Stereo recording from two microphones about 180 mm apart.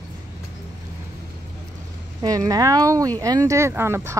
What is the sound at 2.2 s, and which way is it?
Speech, 20° right (ahead or behind).